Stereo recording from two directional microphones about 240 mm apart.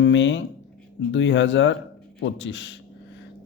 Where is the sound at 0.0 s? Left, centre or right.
Left.